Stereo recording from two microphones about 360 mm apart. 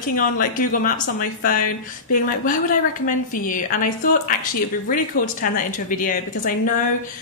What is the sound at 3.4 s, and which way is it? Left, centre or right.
Speech, left.